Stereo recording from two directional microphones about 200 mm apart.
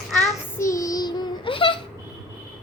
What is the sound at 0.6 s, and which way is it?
Child singing, 15° left (ahead or behind).